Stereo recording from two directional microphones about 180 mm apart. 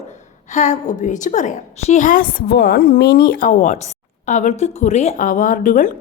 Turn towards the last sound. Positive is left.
turn(degrees=45)  # may be behind; listen again after turning